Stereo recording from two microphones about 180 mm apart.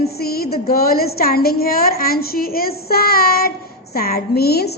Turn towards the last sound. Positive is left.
turn(degrees=60)  # may be behind; listen again after turning